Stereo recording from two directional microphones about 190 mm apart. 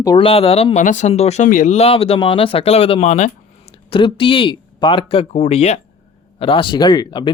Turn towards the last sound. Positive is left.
turn(degrees=25)  # may be behind; listen again after turning